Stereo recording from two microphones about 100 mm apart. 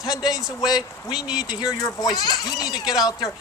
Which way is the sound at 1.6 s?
40° left (ahead or behind).